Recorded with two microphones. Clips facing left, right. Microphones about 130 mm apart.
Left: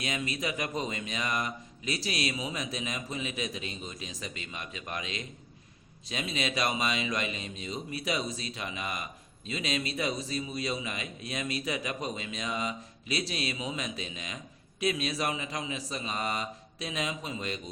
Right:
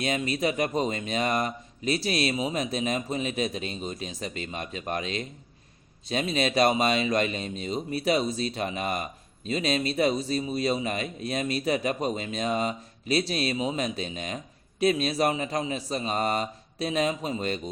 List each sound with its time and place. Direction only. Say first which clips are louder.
0.0 s a man's voice: right 7 dB; 30° right (ahead or behind)
6.8 s a man's voice: right 7 dB; 50° right (ahead or behind)